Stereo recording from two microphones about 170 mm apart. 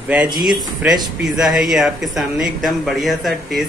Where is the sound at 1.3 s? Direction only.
Centre (ahead or behind).